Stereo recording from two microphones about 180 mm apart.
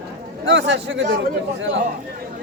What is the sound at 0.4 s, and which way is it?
Speech, 85° right.